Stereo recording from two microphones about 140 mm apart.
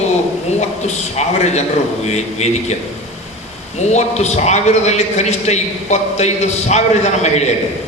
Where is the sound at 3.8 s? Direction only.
55° left (ahead or behind).